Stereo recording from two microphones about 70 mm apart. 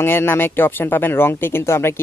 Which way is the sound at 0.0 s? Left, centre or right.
Left.